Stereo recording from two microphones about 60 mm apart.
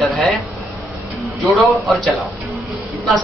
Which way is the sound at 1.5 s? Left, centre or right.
Centre.